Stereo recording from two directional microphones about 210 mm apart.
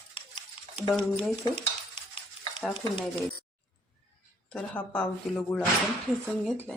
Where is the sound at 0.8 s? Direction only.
25° left (ahead or behind).